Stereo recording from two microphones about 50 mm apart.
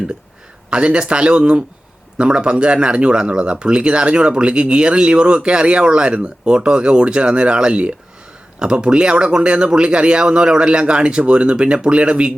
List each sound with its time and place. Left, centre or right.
0.7 s speech: right